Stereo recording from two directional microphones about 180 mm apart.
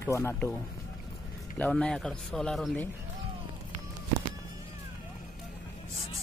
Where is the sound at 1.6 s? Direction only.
5° left (ahead or behind).